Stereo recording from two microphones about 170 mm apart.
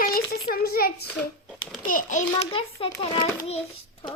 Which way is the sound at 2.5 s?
30° left (ahead or behind).